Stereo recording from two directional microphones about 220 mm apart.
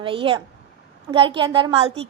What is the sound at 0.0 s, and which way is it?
A woman's voice, 25° right (ahead or behind).